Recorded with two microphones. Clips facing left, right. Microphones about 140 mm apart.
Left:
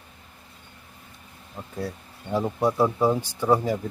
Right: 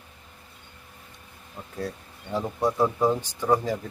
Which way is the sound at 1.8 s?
10° left (ahead or behind).